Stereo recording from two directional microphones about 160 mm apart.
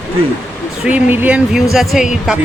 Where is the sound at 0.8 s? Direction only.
10° right (ahead or behind).